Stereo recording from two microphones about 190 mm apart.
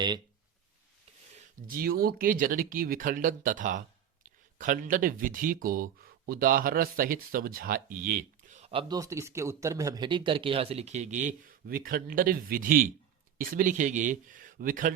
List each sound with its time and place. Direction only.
1.4 s speech: 50° right (ahead or behind)